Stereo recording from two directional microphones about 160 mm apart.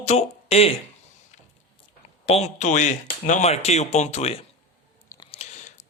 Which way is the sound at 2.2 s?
40° left (ahead or behind).